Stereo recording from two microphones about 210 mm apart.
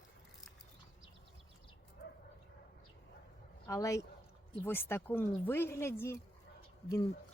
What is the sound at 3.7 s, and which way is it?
Speech, 15° left (ahead or behind).